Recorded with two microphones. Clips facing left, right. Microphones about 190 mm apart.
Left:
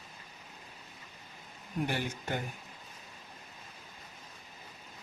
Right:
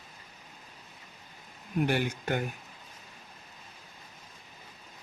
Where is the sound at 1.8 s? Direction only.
70° right (ahead or behind).